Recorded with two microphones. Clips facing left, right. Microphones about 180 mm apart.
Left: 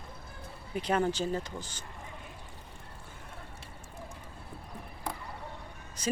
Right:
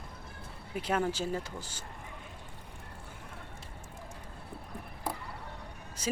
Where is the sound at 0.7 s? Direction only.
5° right (ahead or behind).